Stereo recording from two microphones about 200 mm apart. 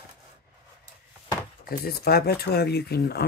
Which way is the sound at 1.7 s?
50° left (ahead or behind).